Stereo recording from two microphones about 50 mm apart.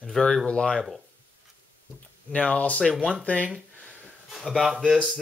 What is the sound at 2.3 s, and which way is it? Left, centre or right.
Speech, left.